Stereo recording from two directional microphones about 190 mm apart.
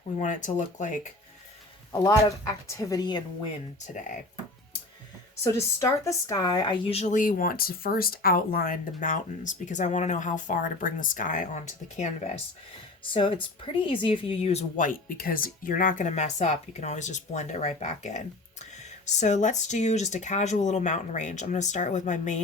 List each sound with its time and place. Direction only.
0.2 s speech: 40° left (ahead or behind)
1.9 s speech: 15° left (ahead or behind)
5.4 s speech: 15° left (ahead or behind); by 12.3 s 40° left (ahead or behind)
13.1 s speech: 25° left (ahead or behind)
19.2 s speech: 40° left (ahead or behind)